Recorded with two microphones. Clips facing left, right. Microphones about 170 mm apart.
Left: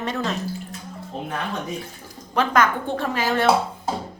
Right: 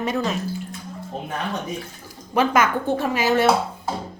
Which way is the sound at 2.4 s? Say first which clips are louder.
Right 1 dB; 5° right (ahead or behind).